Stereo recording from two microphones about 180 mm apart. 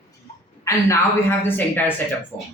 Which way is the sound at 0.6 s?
15° left (ahead or behind).